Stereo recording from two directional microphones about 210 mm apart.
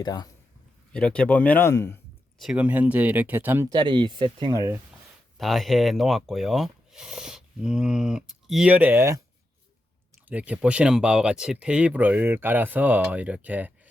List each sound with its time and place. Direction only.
0.0 s speech: 20° left (ahead or behind)
0.9 s speech: 5° left (ahead or behind)
2.4 s speech: 5° right (ahead or behind)
3.8 s speech: 20° right (ahead or behind)
5.4 s speech: centre (ahead or behind)
10.2 s speech: 5° right (ahead or behind)